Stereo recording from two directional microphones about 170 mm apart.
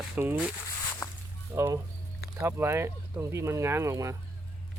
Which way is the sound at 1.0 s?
20° left (ahead or behind).